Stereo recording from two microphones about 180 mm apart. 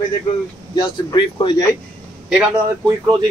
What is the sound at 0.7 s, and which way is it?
Speech, 25° left (ahead or behind).